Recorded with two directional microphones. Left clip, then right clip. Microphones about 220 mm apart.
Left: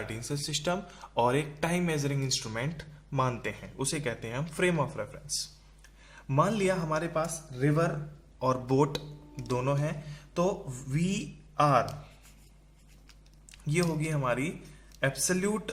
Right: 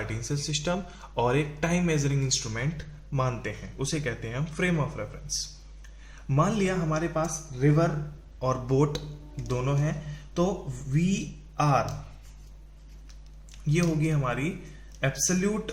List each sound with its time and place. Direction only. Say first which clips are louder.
0.1 s speech: right 2 dB; 30° left (ahead or behind)
11.5 s speech: left 1 dB; 40° left (ahead or behind)
13.7 s speech: right 3 dB; 35° left (ahead or behind)